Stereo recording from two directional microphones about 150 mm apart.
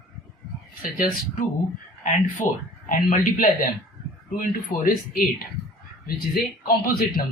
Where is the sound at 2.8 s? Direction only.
65° left (ahead or behind).